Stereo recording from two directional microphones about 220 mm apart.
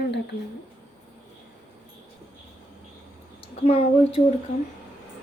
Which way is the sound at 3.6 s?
25° left (ahead or behind).